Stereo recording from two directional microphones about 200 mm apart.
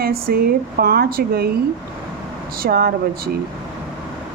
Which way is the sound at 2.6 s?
50° right (ahead or behind).